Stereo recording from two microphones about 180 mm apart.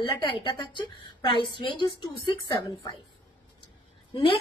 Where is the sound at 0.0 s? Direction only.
25° left (ahead or behind).